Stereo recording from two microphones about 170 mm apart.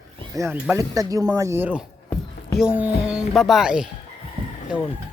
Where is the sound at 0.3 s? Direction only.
15° right (ahead or behind).